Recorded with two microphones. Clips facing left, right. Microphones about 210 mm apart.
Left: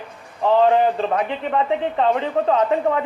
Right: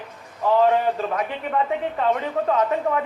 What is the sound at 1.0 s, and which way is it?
A man's voice, 30° left (ahead or behind).